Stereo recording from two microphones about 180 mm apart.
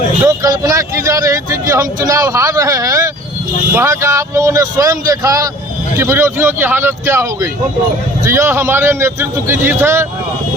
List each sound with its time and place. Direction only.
0.3 s speech: 20° right (ahead or behind)